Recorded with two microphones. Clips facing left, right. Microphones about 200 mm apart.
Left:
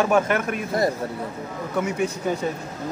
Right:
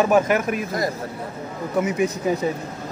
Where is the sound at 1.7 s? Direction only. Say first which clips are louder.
Right 3 dB; 5° right (ahead or behind).